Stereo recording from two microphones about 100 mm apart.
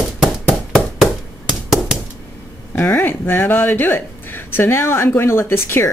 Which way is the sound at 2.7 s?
20° left (ahead or behind).